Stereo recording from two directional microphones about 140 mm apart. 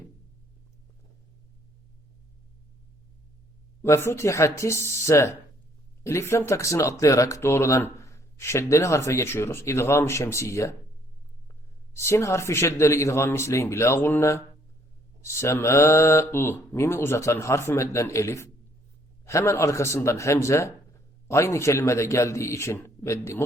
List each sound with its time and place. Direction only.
3.8 s speech: 20° left (ahead or behind)
11.9 s speech: 20° left (ahead or behind)